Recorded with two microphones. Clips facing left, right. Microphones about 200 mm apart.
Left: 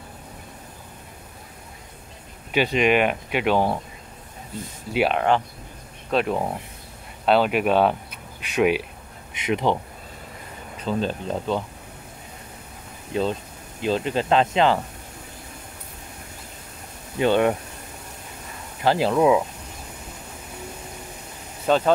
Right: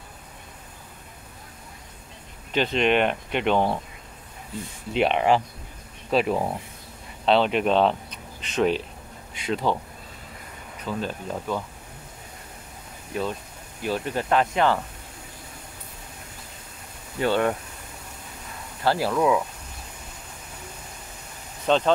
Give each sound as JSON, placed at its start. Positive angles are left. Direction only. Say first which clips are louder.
{"t": 2.5, "sound": "speech", "louder": "left 2 dB", "side_deg": 10}
{"t": 4.9, "sound": "speech", "louder": "even", "side_deg": 0}
{"t": 10.9, "sound": "speech", "louder": "left 5 dB", "side_deg": 25}
{"t": 13.1, "sound": "speech", "louder": "left 4 dB", "side_deg": 25}
{"t": 17.2, "sound": "speech", "louder": "left 3 dB", "side_deg": 20}
{"t": 18.8, "sound": "speech", "louder": "left 3 dB", "side_deg": 20}
{"t": 21.6, "sound": "speech", "louder": "left 1 dB", "side_deg": 5}